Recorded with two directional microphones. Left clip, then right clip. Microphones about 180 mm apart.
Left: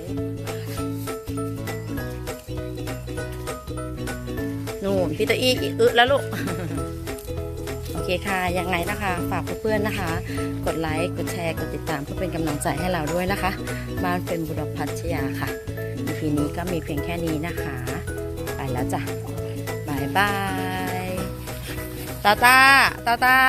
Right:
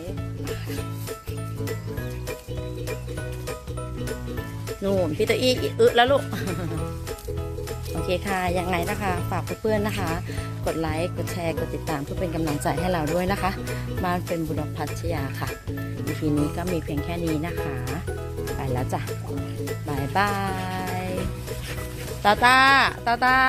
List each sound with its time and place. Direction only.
4.8 s speech: centre (ahead or behind)
8.0 s speech: 5° right (ahead or behind)
14.8 s speech: 5° left (ahead or behind)
19.9 s music: centre (ahead or behind)
22.2 s speech: centre (ahead or behind)